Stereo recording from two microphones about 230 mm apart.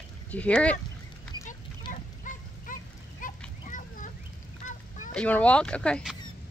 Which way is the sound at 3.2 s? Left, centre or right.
Left.